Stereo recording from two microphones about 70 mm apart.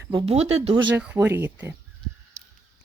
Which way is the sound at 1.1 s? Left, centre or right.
Right.